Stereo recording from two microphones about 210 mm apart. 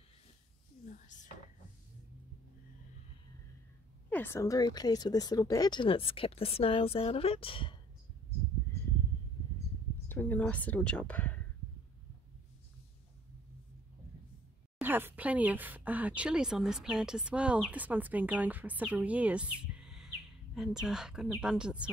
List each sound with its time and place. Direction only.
0.8 s a sound: 35° left (ahead or behind)
4.1 s speech: 10° left (ahead or behind); by 7.7 s 25° left (ahead or behind)
10.0 s speech: 10° left (ahead or behind)
14.8 s a woman's voice: 10° right (ahead or behind)